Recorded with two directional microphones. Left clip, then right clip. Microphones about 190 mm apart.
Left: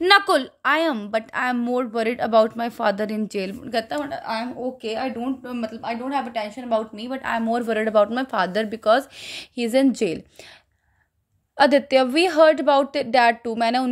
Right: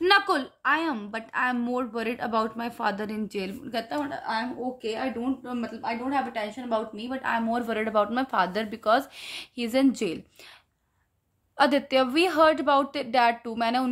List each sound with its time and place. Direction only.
0.0 s a woman's voice: 35° left (ahead or behind)
11.5 s a woman's voice: 25° left (ahead or behind)